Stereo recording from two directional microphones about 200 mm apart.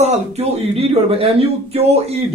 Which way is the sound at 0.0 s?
30° right (ahead or behind).